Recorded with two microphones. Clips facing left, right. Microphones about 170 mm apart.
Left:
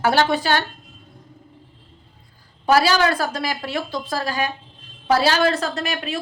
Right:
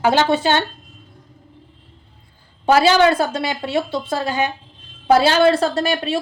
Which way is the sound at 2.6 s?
25° right (ahead or behind).